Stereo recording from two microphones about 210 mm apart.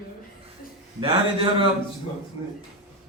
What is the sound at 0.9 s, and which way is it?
Speech, 25° right (ahead or behind).